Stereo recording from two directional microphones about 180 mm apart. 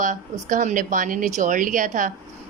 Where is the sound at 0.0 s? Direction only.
45° right (ahead or behind).